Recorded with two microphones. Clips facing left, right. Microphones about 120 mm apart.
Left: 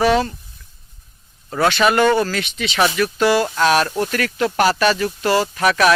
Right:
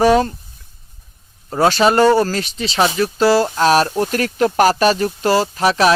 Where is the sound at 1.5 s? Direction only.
35° right (ahead or behind).